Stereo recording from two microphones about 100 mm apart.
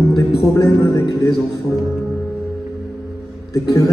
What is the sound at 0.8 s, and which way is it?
Speech, 30° left (ahead or behind).